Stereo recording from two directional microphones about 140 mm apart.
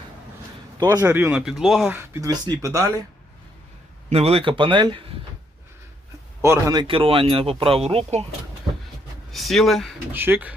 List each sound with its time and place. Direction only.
0.9 s speech: 15° right (ahead or behind)
1.3 s speech: 5° right (ahead or behind)
1.9 s speech: 15° right (ahead or behind)
4.1 s speech: 45° right (ahead or behind)
6.4 s speech: 20° right (ahead or behind)
6.8 s speech: 40° right (ahead or behind)
9.3 s speech: centre (ahead or behind)
10.1 s speech: 15° right (ahead or behind)